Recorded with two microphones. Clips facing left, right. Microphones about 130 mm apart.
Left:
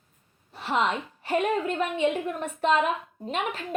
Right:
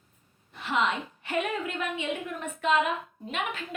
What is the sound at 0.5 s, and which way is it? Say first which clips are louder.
A woman's voice: left 2 dB; 35° left (ahead or behind).